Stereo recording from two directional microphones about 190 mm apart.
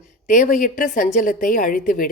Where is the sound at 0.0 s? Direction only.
45° left (ahead or behind).